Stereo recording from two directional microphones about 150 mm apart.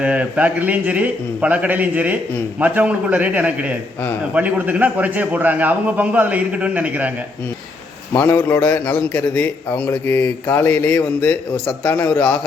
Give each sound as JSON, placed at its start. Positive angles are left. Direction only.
{"t": 0.0, "sound": "a man's voice", "side_deg": -10}
{"t": 8.1, "sound": "a man's voice", "side_deg": 15}